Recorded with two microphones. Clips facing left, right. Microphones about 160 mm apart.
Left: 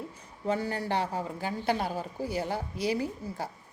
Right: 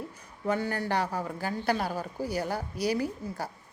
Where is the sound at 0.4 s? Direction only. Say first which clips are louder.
Right 1 dB; 30° left (ahead or behind).